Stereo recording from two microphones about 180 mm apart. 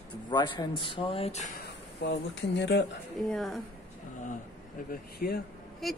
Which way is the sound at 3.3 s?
Centre (ahead or behind).